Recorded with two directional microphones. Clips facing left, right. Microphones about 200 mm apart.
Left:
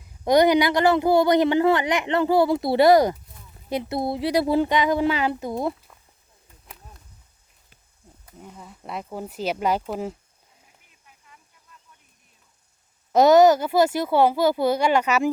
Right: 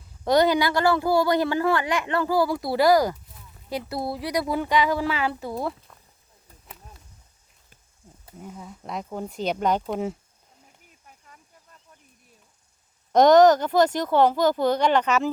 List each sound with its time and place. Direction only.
0.3 s speech: 15° left (ahead or behind)
8.4 s speech: 5° right (ahead or behind)
11.0 s a sound: 45° right (ahead or behind)
13.1 s speech: 5° left (ahead or behind)